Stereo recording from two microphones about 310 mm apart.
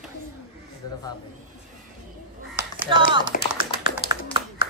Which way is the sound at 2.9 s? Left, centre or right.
Centre.